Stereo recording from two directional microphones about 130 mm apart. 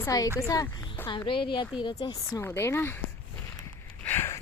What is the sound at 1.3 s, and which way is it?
Speech, 40° left (ahead or behind).